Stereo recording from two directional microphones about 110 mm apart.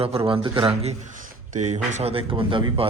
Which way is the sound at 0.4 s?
50° right (ahead or behind).